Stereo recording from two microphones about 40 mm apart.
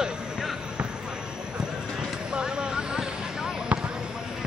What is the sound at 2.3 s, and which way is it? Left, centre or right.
Vehicle, right.